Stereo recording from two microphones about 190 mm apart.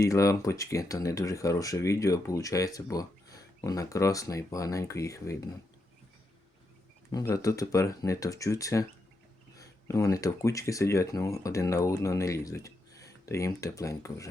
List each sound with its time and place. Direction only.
0.0 s speech: 15° left (ahead or behind)
7.1 s speech: 20° left (ahead or behind)